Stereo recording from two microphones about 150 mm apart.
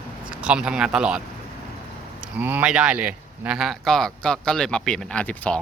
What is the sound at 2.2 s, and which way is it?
Speech, 10° right (ahead or behind).